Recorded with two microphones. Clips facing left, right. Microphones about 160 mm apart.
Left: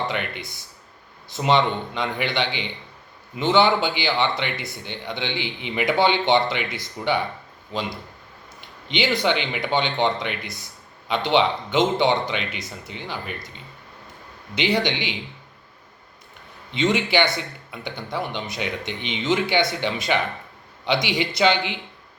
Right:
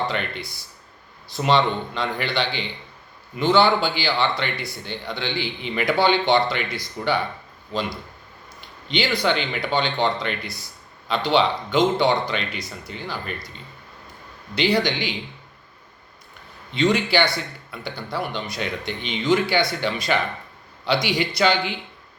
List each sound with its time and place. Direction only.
0.1 s speech: 15° left (ahead or behind)
14.5 s speech: 20° left (ahead or behind)
16.7 s speech: 20° left (ahead or behind)